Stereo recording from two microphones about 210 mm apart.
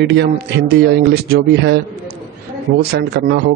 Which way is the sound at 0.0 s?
55° right (ahead or behind).